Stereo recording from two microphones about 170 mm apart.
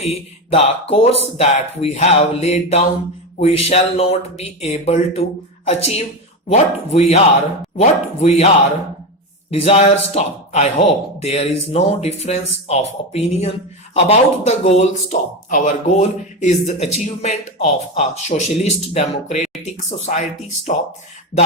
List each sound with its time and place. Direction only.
0.5 s speech: 35° left (ahead or behind)
9.5 s speech: 35° left (ahead or behind)